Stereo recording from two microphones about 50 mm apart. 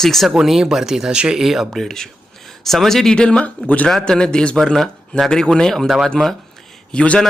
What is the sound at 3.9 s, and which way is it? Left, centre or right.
A man's voice, centre.